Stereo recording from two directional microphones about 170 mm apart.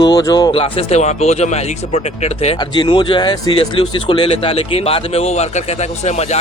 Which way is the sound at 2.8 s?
30° left (ahead or behind).